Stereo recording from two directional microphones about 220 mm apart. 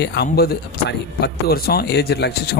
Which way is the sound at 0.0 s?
50° left (ahead or behind).